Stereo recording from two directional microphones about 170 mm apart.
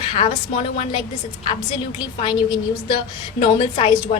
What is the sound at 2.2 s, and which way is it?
A woman's voice, 30° left (ahead or behind).